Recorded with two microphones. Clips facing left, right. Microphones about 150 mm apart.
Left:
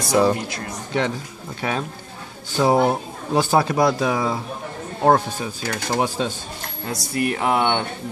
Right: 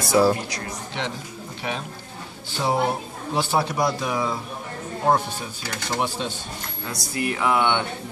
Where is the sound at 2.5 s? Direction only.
45° left (ahead or behind).